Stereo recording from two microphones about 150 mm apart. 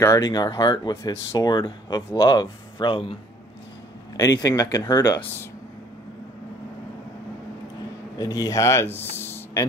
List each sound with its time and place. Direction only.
0.0 s speech: 20° left (ahead or behind)
4.2 s speech: 25° left (ahead or behind)
8.2 s speech: 20° left (ahead or behind)
9.1 s a sound: 15° left (ahead or behind)